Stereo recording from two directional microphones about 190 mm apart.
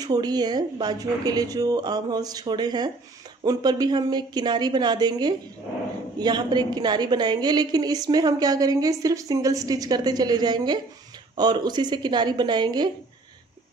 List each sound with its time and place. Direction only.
0.0 s a woman's voice: 20° right (ahead or behind)